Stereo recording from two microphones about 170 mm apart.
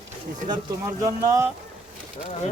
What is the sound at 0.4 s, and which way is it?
Speech, 20° right (ahead or behind).